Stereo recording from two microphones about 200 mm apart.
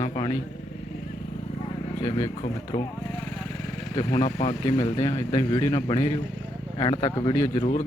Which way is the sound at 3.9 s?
20° left (ahead or behind).